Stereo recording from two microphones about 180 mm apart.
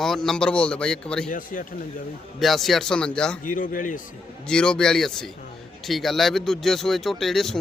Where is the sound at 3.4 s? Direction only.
50° left (ahead or behind).